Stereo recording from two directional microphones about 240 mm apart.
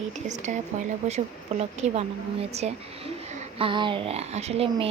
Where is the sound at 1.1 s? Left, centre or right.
Right.